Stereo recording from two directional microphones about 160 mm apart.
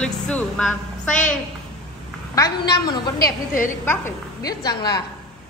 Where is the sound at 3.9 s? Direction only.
20° left (ahead or behind).